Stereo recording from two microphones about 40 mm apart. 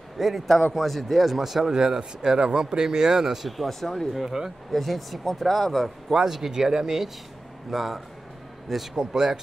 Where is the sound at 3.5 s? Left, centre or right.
Centre.